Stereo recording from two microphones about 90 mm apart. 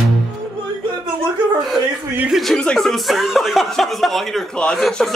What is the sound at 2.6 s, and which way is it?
Speech, 5° left (ahead or behind).